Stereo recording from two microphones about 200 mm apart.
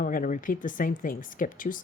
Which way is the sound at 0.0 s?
45° left (ahead or behind).